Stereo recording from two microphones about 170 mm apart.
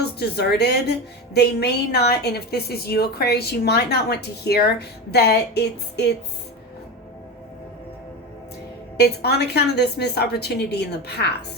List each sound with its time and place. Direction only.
0.0 s a woman's voice: 75° left (ahead or behind)
9.0 s a woman's voice: 75° left (ahead or behind)